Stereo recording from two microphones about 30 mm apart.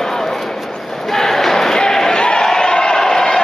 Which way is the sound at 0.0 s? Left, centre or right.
Centre.